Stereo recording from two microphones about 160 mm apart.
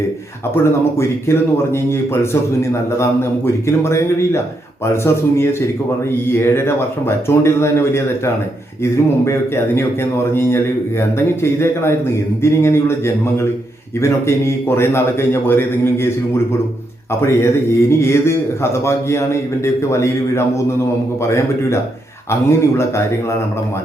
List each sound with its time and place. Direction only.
0.5 s a man's voice: 15° left (ahead or behind)
14.0 s a man's voice: 15° left (ahead or behind)
17.2 s a man's voice: 15° left (ahead or behind)